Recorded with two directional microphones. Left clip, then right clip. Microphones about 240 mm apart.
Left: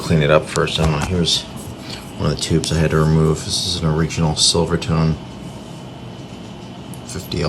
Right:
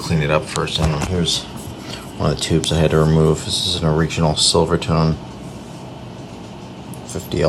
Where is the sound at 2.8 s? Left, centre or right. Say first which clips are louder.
Right 3 dB; left.